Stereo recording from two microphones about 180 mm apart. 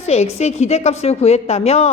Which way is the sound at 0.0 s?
35° left (ahead or behind).